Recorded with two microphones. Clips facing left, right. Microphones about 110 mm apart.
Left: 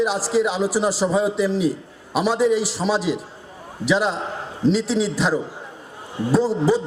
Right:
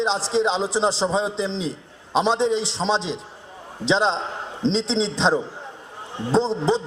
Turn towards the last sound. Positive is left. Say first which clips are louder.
# left 2 dB
turn(degrees=-25)  # may be behind; listen again after turning